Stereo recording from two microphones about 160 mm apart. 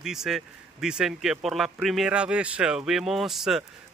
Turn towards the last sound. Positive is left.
turn(degrees=0)  # may be behind; listen again after turning